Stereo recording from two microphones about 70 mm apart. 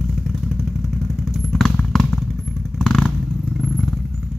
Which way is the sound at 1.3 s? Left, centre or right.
Centre.